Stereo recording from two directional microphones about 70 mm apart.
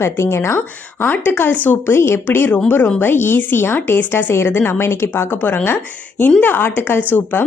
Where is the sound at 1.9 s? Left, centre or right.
Left.